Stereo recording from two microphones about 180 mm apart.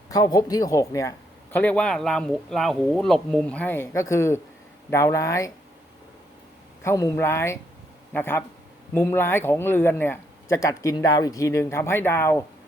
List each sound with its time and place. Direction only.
0.1 s speech: 20° left (ahead or behind)
1.5 s speech: 5° left (ahead or behind)
6.8 s speech: 20° left (ahead or behind)